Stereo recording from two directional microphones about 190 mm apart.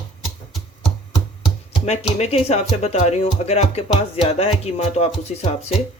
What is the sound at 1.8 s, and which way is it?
Speech, 35° left (ahead or behind).